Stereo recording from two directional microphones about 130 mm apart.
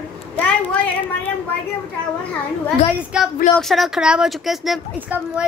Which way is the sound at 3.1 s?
5° right (ahead or behind).